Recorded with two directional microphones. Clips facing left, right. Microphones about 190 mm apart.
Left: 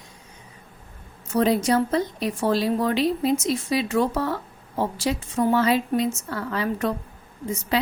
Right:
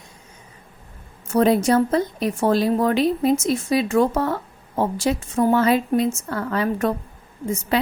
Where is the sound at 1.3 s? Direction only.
55° right (ahead or behind).